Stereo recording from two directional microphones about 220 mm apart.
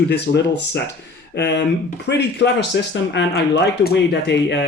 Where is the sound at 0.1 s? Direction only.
50° left (ahead or behind).